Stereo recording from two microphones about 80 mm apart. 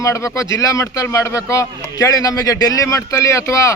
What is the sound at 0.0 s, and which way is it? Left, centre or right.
A man's voice, left.